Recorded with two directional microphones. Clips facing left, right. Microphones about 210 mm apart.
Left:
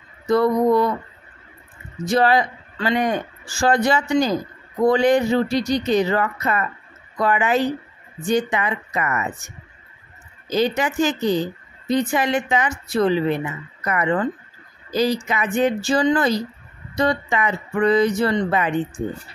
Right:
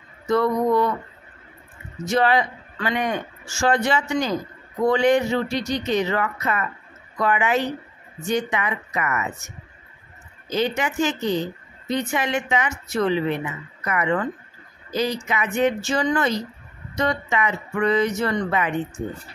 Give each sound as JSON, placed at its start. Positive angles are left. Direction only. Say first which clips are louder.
{"t": 0.3, "sound": "speech", "louder": "left 3 dB", "side_deg": 35}
{"t": 2.0, "sound": "speech", "louder": "left 2 dB", "side_deg": 35}
{"t": 10.5, "sound": "speech", "louder": "left 3 dB", "side_deg": 35}